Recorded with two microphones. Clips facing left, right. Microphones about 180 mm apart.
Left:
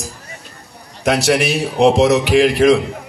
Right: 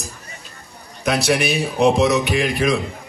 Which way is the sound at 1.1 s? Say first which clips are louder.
Left 3 dB; 80° left.